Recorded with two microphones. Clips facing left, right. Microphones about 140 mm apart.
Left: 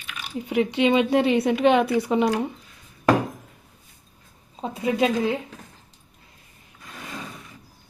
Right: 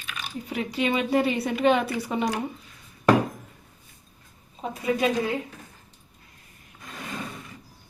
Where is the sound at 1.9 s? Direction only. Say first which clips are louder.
Left 7 dB; 20° left (ahead or behind).